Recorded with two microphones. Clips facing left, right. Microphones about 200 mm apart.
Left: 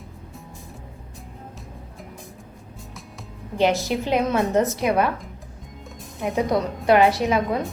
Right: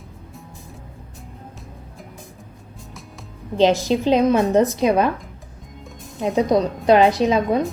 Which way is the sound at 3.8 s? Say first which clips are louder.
Right 5 dB; 15° right (ahead or behind).